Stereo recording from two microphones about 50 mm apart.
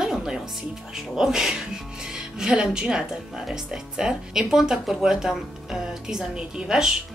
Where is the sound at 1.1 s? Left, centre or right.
Centre.